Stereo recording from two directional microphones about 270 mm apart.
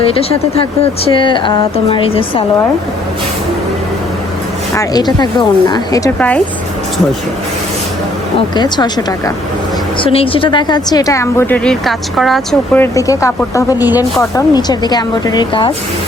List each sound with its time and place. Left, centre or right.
0.0 s speech: left
4.7 s speech: centre
8.5 s speech: centre